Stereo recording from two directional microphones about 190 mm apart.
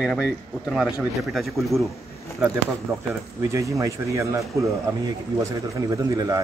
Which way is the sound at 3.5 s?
15° right (ahead or behind).